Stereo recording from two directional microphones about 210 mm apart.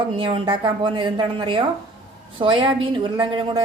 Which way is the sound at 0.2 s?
25° right (ahead or behind).